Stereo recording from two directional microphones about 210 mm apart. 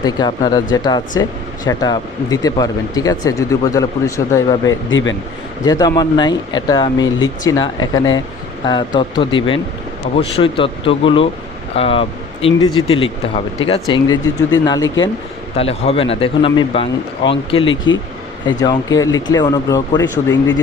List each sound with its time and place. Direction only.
0.0 s speech: 20° left (ahead or behind)
4.9 s speech: 65° left (ahead or behind)
5.6 s speech: 15° left (ahead or behind)
15.5 s speech: 30° left (ahead or behind); by 20.3 s 15° left (ahead or behind)